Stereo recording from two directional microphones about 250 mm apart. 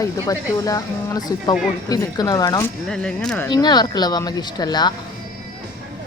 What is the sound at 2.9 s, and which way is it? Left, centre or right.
Speech, centre.